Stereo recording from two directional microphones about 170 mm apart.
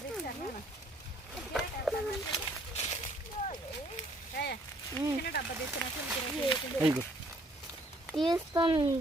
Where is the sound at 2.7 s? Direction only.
40° left (ahead or behind).